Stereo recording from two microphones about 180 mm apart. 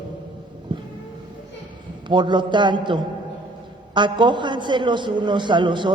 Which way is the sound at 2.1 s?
25° right (ahead or behind).